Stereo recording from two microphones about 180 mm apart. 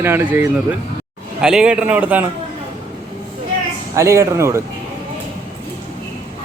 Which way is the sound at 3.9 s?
15° right (ahead or behind).